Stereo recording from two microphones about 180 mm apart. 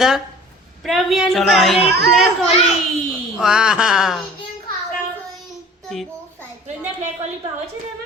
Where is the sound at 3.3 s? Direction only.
5° right (ahead or behind).